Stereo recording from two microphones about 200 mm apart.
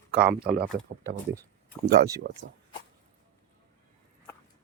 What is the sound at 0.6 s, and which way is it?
Speech, centre (ahead or behind).